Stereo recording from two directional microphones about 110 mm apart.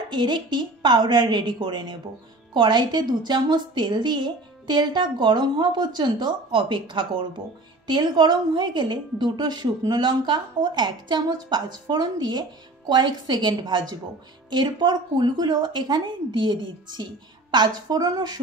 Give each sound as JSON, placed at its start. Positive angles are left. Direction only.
{"t": 0.1, "sound": "a woman's voice", "side_deg": -45}